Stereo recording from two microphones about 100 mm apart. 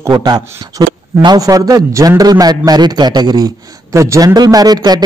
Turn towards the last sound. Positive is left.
turn(degrees=-40)  # may be behind; listen again after turning